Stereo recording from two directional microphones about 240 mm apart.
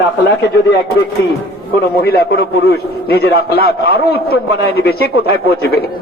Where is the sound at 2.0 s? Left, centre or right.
Left.